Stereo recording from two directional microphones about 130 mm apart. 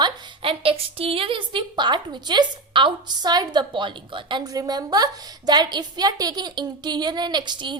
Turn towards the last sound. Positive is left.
turn(degrees=-35)  # may be behind; listen again after turning